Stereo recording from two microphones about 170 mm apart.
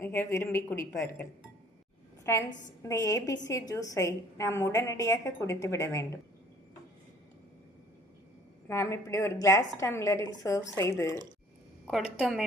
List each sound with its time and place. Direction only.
0.0 s a woman's voice: 15° left (ahead or behind)
8.6 s a woman's voice: 15° left (ahead or behind)